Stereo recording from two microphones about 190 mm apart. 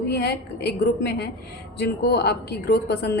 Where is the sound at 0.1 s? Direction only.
60° left (ahead or behind).